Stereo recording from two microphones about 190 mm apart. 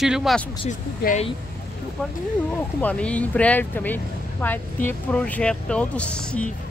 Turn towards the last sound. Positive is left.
turn(degrees=5)  # may be behind; listen again after turning